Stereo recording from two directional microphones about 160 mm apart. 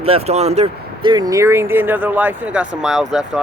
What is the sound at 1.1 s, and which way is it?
Speech, 25° right (ahead or behind).